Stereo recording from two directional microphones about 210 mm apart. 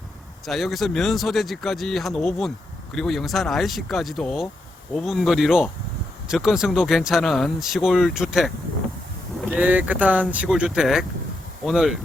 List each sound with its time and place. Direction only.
0.4 s speech: centre (ahead or behind)